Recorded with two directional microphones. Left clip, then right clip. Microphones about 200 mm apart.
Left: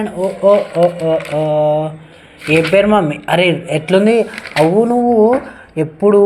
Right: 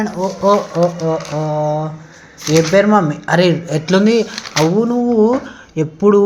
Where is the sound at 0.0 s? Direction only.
25° right (ahead or behind).